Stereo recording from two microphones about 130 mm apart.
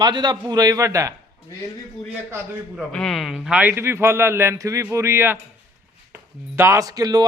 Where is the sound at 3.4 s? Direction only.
10° right (ahead or behind).